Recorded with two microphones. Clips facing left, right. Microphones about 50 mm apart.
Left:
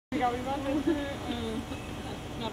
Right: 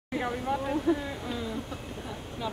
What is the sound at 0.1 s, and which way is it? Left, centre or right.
Speech, centre.